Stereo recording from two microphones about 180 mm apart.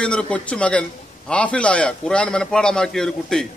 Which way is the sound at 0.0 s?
5° left (ahead or behind).